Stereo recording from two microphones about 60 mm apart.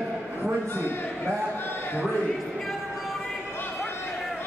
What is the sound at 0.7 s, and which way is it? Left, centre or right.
Speech, left.